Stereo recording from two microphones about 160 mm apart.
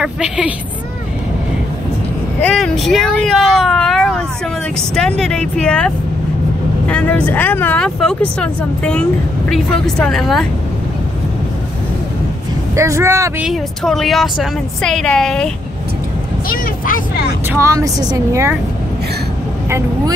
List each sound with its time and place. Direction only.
0.0 s a woman's voice: 5° right (ahead or behind)
2.4 s a woman's voice: centre (ahead or behind)
12.7 s speech: 20° right (ahead or behind)
13.5 s a woman's voice: centre (ahead or behind)
16.4 s speech: 60° left (ahead or behind)
17.5 s speech: 20° right (ahead or behind)